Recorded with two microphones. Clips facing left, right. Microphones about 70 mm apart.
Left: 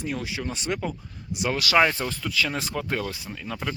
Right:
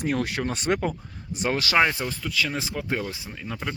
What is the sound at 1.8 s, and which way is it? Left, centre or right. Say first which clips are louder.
Speech: left 2 dB; centre.